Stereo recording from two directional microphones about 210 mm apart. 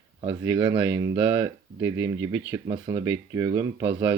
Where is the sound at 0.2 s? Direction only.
20° right (ahead or behind).